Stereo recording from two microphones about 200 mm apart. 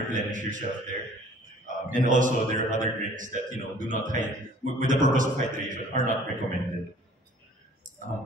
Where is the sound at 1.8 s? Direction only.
40° right (ahead or behind).